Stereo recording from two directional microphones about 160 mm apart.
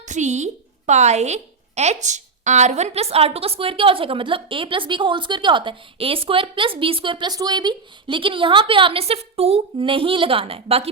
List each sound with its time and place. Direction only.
0.1 s a woman's voice: 45° right (ahead or behind)